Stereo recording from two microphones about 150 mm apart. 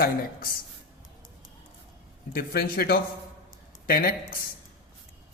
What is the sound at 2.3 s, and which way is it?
Speech, 90° left.